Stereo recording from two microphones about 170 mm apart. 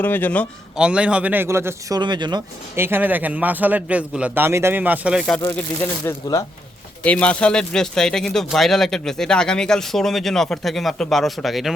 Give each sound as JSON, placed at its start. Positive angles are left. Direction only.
{"t": 0.0, "sound": "a man's voice", "side_deg": 10}
{"t": 0.8, "sound": "a man's voice", "side_deg": -5}
{"t": 2.0, "sound": "speech", "side_deg": -25}
{"t": 2.7, "sound": "a man's voice", "side_deg": -15}
{"t": 6.1, "sound": "speech", "side_deg": 20}
{"t": 7.0, "sound": "speech", "side_deg": 5}